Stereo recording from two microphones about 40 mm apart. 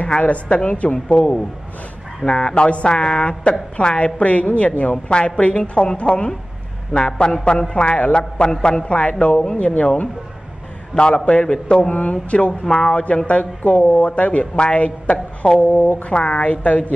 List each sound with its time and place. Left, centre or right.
0.0 s speech: left
0.9 s speech: centre; by 9.4 s left
9.4 s speech: left
11.0 s speech: left
11.9 s speech: left
13.3 s speech: left